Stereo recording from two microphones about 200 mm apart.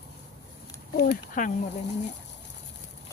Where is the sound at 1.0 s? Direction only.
40° left (ahead or behind).